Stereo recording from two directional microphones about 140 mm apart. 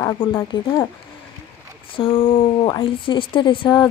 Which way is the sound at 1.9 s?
40° left (ahead or behind).